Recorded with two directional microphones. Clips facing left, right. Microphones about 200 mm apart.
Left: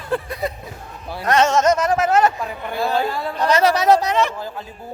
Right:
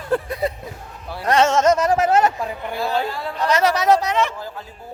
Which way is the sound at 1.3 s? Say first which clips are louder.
Even; 30° right (ahead or behind).